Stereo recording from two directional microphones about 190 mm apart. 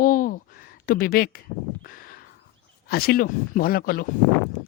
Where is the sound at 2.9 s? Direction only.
55° left (ahead or behind).